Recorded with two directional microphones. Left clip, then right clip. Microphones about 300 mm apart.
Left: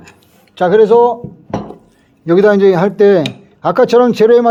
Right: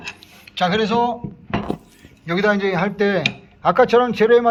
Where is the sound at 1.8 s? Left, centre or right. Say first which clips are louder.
Left 12 dB; left.